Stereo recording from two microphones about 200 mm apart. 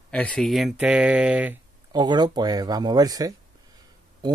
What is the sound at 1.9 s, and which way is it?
Speech, 20° right (ahead or behind).